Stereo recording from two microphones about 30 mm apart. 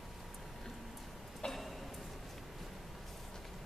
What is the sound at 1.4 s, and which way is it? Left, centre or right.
Tick-tock, left.